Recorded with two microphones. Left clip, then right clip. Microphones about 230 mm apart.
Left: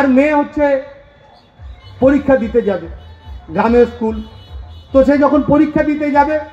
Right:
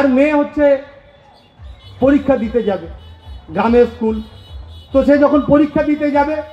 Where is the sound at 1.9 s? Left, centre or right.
Left.